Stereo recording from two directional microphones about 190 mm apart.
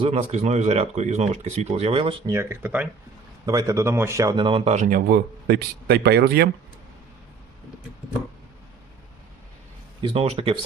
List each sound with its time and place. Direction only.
0.0 s a man's voice: 35° right (ahead or behind)
2.3 s a man's voice: 15° right (ahead or behind); by 6.5 s 55° right (ahead or behind)
10.0 s speech: 30° right (ahead or behind)